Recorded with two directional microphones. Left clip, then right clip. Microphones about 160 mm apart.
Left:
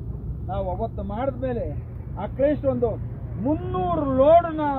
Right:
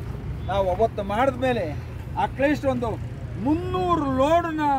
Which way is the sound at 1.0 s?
10° right (ahead or behind).